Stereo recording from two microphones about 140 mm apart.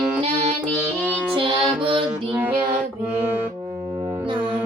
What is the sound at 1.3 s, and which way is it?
Music, 35° right (ahead or behind).